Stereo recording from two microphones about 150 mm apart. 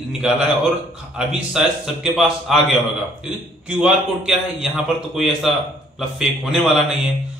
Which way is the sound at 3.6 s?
5° right (ahead or behind).